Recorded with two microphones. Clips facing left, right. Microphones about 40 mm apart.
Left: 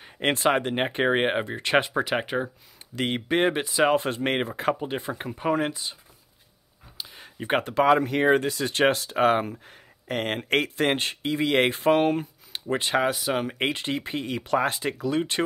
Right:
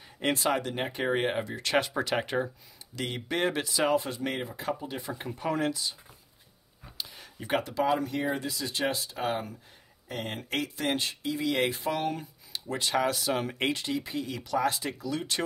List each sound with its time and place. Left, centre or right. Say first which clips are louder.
0.0 s speech: left 5 dB; left; by 2.5 s centre
3.0 s speech: left 6 dB; left
7.0 s a sound: left 1 dB; centre
7.3 s speech: left 5 dB; left
7.8 s speech: left 10 dB; left; by 13.6 s centre
13.6 s speech: left 3 dB; left